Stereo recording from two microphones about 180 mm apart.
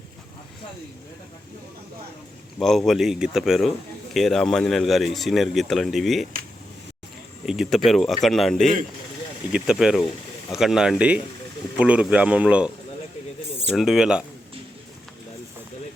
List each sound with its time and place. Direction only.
2.6 s a man's voice: centre (ahead or behind)
7.4 s a man's voice: 5° right (ahead or behind)
13.7 s a man's voice: centre (ahead or behind)